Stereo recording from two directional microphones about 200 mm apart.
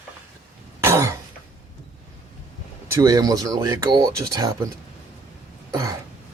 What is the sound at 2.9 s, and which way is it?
Speech, 15° right (ahead or behind).